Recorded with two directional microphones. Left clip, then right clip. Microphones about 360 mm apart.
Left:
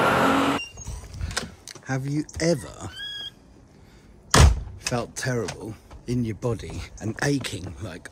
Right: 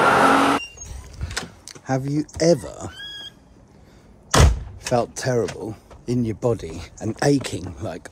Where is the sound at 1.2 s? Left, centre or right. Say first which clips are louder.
Right 1 dB; centre.